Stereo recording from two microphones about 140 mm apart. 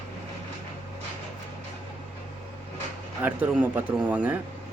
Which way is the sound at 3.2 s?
10° right (ahead or behind).